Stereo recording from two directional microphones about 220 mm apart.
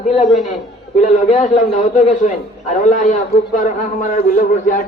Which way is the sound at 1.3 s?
30° left (ahead or behind).